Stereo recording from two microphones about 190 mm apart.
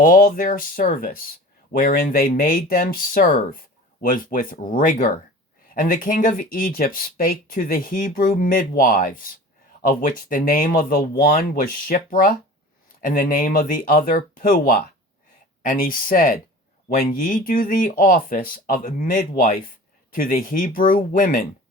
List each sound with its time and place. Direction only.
0.0 s speech: 45° left (ahead or behind)